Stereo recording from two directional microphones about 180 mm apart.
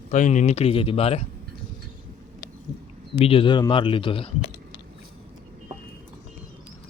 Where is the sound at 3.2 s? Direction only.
30° left (ahead or behind).